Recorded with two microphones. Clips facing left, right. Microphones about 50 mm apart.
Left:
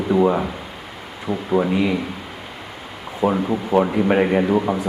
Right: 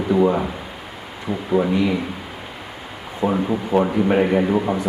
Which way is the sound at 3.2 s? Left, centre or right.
Centre.